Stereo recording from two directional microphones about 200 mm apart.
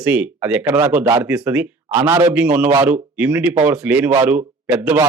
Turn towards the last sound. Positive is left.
turn(degrees=-10)  # may be behind; listen again after turning